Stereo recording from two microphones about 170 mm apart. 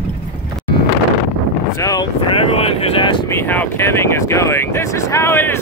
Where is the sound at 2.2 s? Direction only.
35° left (ahead or behind).